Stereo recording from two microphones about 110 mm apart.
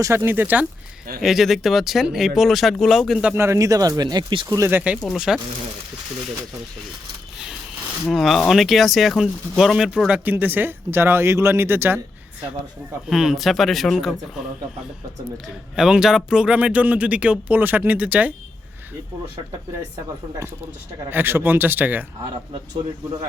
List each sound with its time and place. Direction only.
0.0 s speech: 25° right (ahead or behind)
1.2 s speech: centre (ahead or behind)
3.3 s speech: 25° right (ahead or behind); by 4.4 s 45° right (ahead or behind)
4.4 s speech: 30° right (ahead or behind)
4.7 s a man's voice: 10° right (ahead or behind)
8.0 s speech: centre (ahead or behind)
10.2 s speech: 15° right (ahead or behind)
13.1 s speech: 5° right (ahead or behind)
15.7 s a man's voice: 5° right (ahead or behind)
21.1 s speech: 20° right (ahead or behind)